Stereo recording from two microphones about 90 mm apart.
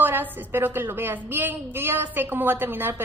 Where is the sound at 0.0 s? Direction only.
20° right (ahead or behind).